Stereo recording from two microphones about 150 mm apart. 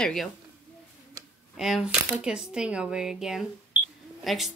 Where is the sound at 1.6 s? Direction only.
5° right (ahead or behind).